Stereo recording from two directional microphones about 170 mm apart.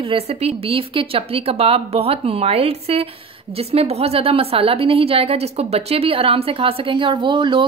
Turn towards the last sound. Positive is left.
turn(degrees=-30)  # may be behind; listen again after turning